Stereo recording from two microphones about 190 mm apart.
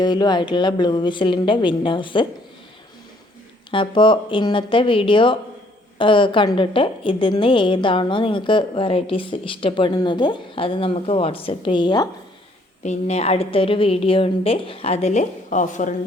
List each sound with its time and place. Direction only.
0.0 s a woman's voice: 20° left (ahead or behind)
3.7 s a woman's voice: 25° left (ahead or behind)
12.8 s a woman's voice: 35° left (ahead or behind)